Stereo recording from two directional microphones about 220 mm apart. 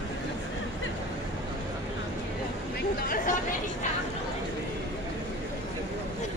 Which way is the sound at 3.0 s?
40° left (ahead or behind).